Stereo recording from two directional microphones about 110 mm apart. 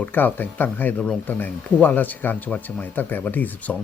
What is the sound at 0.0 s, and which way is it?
Speech, 15° left (ahead or behind).